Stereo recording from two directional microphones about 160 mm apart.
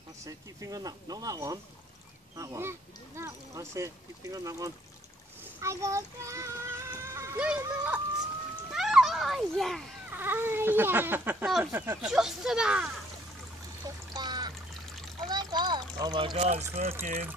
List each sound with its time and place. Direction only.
0.2 s speech: 20° right (ahead or behind)
5.4 s child singing: 20° right (ahead or behind)
7.3 s baby cry: 5° right (ahead or behind)
8.7 s a sound: centre (ahead or behind)
10.1 s baby cry: 15° right (ahead or behind)
11.4 s speech: centre (ahead or behind)
11.7 s baby cry: 15° right (ahead or behind)
12.0 s speech: 5° right (ahead or behind)
14.1 s trickle: 25° right (ahead or behind)
15.2 s a sound: 25° right (ahead or behind)
16.0 s speech: 25° right (ahead or behind); by 17.3 s 45° right (ahead or behind)